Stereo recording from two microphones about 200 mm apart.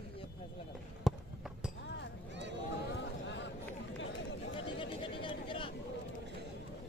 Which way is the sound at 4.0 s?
65° left (ahead or behind).